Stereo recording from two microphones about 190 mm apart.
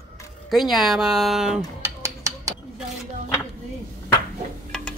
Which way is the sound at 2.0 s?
15° right (ahead or behind).